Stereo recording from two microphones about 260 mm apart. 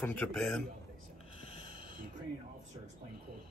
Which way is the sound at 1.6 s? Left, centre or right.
Right.